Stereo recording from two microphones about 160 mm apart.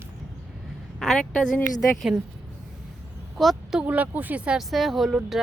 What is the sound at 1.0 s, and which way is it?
Speech, 5° left (ahead or behind).